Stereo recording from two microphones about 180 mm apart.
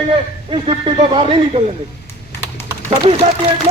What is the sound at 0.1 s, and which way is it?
Speech, 30° right (ahead or behind).